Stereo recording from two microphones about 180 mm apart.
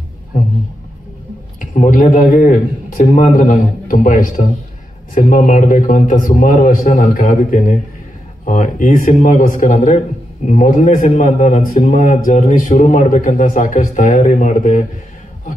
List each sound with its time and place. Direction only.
1.6 s speech: 50° left (ahead or behind)